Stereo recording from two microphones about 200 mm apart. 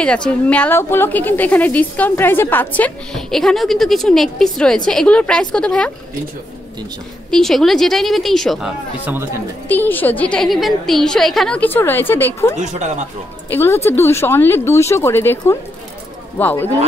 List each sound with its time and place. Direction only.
0.0 s a woman's voice: 5° left (ahead or behind)
7.2 s a woman's voice: centre (ahead or behind)
9.7 s a woman's voice: 10° left (ahead or behind)
12.5 s speech: 35° right (ahead or behind)
13.5 s a woman's voice: 10° left (ahead or behind)